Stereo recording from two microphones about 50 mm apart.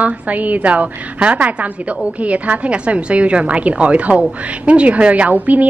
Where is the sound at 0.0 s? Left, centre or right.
Right.